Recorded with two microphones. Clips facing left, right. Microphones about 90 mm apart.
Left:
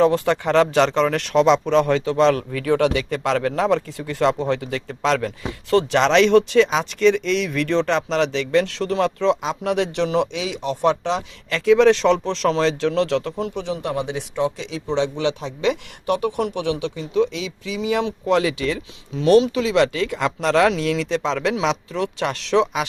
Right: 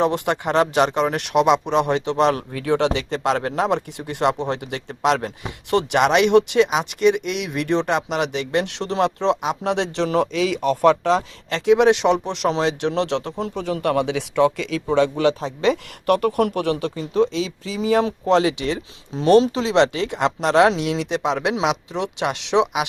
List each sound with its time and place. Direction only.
0.0 s speech: 20° right (ahead or behind); by 11.2 s 45° right (ahead or behind)
11.4 s a man's voice: 25° right (ahead or behind)
13.4 s a man's voice: 40° right (ahead or behind)
13.8 s a man's voice: 65° right (ahead or behind); by 22.9 s 20° right (ahead or behind)